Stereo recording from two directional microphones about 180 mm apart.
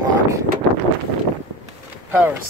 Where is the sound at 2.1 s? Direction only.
10° right (ahead or behind).